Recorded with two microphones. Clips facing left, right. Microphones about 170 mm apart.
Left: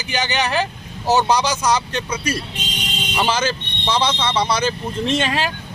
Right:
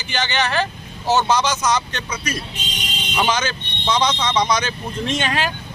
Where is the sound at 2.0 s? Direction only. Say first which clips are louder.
Left 5 dB; 10° left (ahead or behind).